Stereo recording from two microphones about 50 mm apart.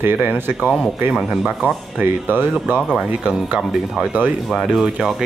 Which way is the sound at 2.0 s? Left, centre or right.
Right.